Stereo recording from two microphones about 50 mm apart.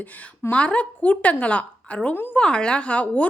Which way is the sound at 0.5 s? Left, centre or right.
Left.